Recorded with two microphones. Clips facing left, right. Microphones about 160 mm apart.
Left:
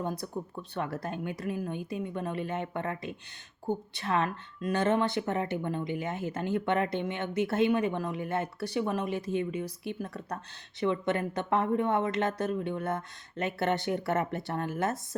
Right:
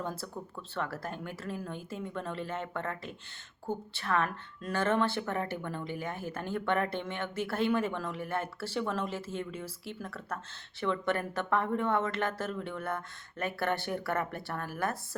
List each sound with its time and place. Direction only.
0.0 s speech: 15° left (ahead or behind)